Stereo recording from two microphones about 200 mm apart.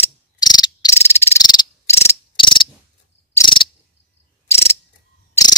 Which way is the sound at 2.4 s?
25° left (ahead or behind).